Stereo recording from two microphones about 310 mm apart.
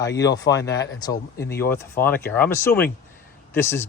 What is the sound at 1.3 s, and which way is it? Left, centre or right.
Speech, left.